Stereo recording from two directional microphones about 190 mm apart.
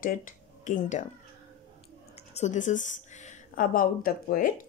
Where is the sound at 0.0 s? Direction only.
45° left (ahead or behind).